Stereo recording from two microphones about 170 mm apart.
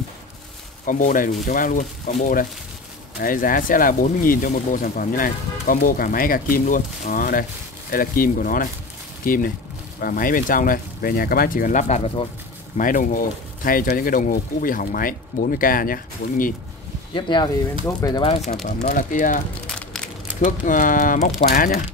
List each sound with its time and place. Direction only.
0.8 s speech: 50° left (ahead or behind)
17.1 s speech: 25° left (ahead or behind)
18.8 s speech: 50° left (ahead or behind)